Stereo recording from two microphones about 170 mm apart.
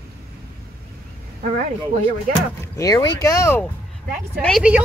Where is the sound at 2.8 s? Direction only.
25° left (ahead or behind).